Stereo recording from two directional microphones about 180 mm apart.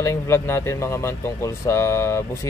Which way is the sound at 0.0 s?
15° left (ahead or behind).